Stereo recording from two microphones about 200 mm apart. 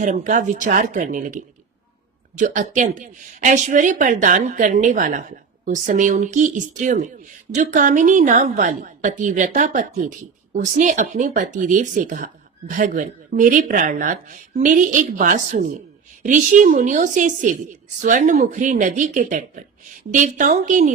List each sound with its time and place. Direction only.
0.0 s speech: 40° right (ahead or behind)